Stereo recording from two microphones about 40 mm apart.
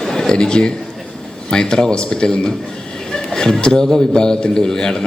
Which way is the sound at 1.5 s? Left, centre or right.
Centre.